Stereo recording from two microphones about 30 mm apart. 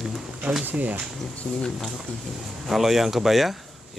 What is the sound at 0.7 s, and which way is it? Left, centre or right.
Speech, right.